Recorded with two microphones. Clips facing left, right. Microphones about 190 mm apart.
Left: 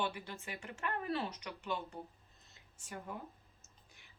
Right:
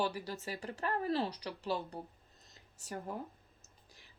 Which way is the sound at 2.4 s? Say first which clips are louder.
Right 4 dB; 40° right (ahead or behind).